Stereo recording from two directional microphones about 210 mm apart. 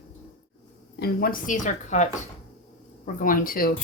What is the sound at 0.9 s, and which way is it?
Speech, 45° left (ahead or behind).